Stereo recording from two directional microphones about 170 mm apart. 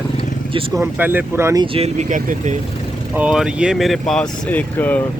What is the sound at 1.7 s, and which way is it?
Speech, 40° right (ahead or behind).